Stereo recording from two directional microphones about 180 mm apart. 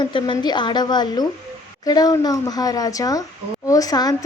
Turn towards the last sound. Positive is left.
turn(degrees=20)  # may be behind; listen again after turning